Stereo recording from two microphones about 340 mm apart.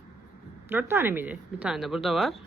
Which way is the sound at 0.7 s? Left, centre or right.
Centre.